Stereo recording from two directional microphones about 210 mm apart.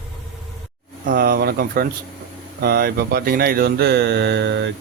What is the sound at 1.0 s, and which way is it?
Speech, 45° right (ahead or behind).